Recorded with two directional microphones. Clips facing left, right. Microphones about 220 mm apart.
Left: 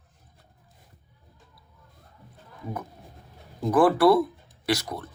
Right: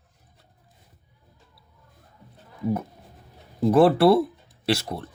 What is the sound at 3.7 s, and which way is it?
Speech, 25° right (ahead or behind).